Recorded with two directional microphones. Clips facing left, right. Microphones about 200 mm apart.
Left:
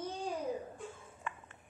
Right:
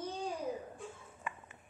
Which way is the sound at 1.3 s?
10° right (ahead or behind).